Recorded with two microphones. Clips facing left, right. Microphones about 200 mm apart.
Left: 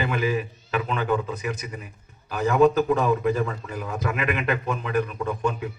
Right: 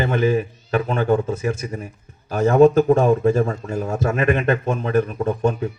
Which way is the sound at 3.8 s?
45° right (ahead or behind).